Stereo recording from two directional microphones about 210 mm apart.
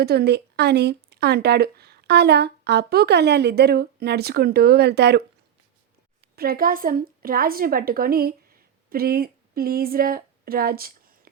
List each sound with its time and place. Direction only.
0.0 s speech: 50° right (ahead or behind)
6.3 s speech: 45° right (ahead or behind)